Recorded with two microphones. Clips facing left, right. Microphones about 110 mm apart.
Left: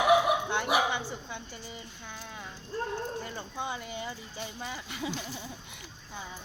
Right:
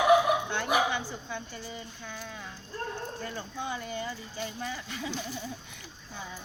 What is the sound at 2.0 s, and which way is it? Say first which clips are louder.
Speech: even; 20° left (ahead or behind).